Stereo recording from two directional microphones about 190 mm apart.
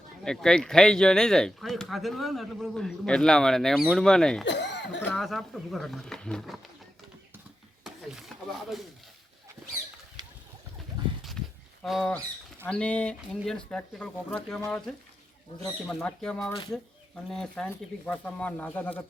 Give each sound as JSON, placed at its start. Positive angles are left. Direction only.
{"t": 0.3, "sound": "speech", "side_deg": 5}
{"t": 4.4, "sound": "speech", "side_deg": 65}
{"t": 5.1, "sound": "speech", "side_deg": 0}
{"t": 11.8, "sound": "speech", "side_deg": 0}